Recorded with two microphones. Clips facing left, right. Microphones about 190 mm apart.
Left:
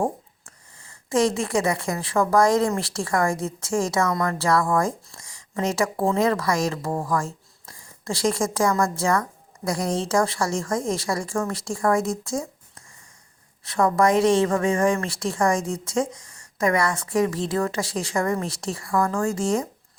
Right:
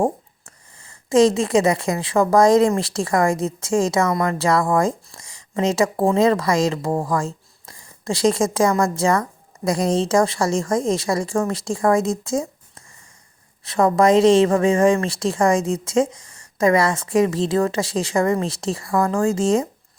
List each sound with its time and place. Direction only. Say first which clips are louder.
1.1 s a woman's voice: right 6 dB; 20° right (ahead or behind)